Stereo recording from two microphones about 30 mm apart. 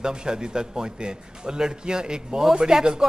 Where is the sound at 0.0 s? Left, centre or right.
Right.